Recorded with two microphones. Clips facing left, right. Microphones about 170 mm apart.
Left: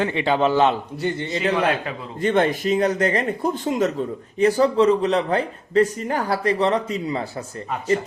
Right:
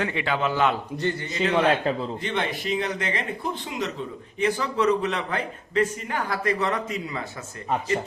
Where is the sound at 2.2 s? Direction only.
45° left (ahead or behind).